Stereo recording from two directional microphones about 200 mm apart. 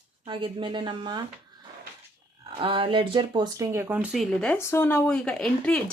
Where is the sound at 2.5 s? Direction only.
25° right (ahead or behind); by 4.6 s centre (ahead or behind).